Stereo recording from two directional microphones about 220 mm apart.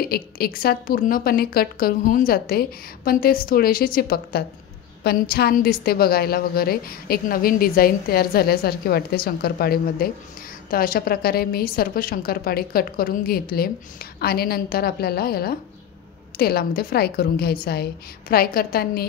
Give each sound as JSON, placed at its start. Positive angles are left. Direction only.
{"t": 0.1, "sound": "a woman's voice", "side_deg": 45}